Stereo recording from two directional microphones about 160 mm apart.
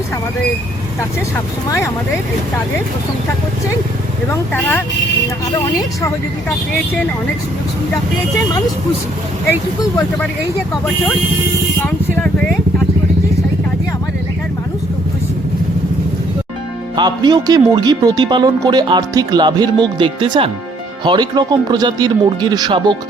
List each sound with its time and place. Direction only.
4.3 s speech: 10° left (ahead or behind)
11.9 s vehicle: 10° left (ahead or behind)
17.0 s speech: 25° right (ahead or behind)